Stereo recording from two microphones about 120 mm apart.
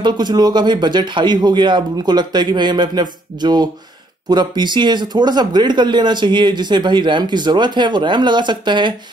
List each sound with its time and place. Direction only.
0.0 s speech: 35° right (ahead or behind)